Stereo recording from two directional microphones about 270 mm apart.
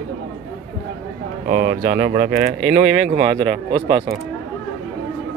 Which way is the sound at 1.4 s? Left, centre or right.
Right.